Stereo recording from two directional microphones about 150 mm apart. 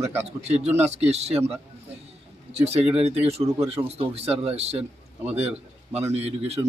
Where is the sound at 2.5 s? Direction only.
45° right (ahead or behind).